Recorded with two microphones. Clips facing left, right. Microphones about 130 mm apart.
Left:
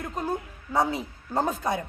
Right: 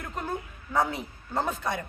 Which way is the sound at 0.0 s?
15° left (ahead or behind).